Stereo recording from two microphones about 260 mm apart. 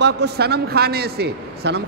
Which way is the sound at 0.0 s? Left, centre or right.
Right.